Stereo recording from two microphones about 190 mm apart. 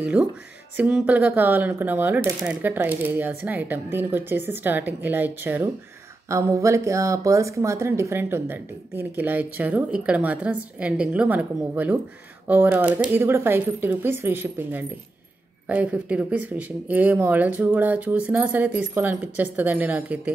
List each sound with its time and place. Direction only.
0.2 s speech: 10° right (ahead or behind)